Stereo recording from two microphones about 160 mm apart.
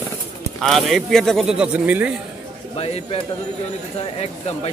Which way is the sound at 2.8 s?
40° left (ahead or behind).